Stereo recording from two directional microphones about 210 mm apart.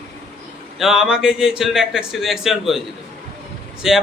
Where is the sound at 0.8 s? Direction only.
Centre (ahead or behind).